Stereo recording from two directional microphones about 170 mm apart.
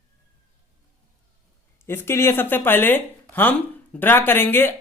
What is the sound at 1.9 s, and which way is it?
Speech, 15° left (ahead or behind).